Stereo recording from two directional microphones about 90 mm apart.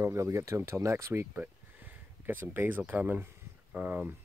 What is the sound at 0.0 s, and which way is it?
Speech, 30° right (ahead or behind).